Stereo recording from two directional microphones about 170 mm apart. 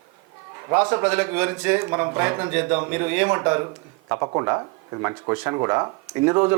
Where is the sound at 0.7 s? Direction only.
15° right (ahead or behind).